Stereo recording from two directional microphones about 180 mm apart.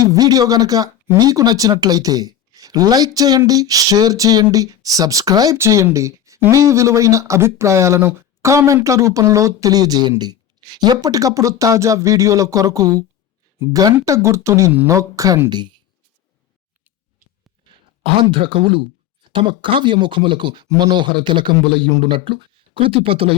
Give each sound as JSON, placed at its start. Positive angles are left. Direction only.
{"t": 0.0, "sound": "speech", "side_deg": -20}
{"t": 18.0, "sound": "speech", "side_deg": -30}